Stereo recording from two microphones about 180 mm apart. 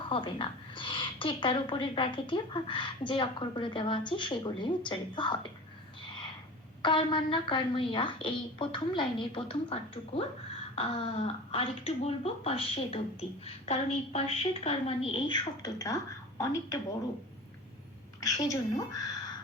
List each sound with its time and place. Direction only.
0.0 s a woman's voice: 30° left (ahead or behind)
6.8 s a woman's voice: 25° left (ahead or behind)
18.2 s a woman's voice: 20° left (ahead or behind)